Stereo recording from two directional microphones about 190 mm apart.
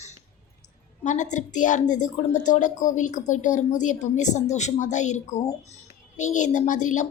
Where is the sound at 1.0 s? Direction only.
40° left (ahead or behind).